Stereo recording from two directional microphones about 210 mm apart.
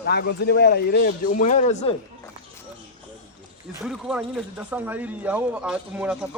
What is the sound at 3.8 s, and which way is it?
Speech, centre (ahead or behind).